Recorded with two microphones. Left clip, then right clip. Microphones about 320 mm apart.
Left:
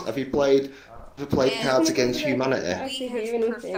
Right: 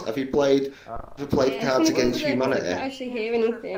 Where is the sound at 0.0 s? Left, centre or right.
Centre.